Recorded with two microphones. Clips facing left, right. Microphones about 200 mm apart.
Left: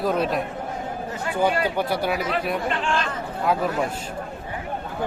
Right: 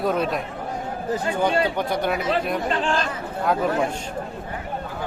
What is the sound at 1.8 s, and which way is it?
Speech, 5° left (ahead or behind).